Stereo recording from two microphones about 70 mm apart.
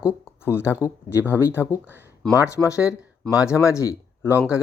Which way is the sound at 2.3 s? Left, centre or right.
Left.